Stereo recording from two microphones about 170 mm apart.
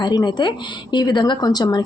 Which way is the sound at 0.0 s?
25° left (ahead or behind).